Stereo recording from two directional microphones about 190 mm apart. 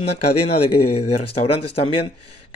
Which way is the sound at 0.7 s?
30° left (ahead or behind).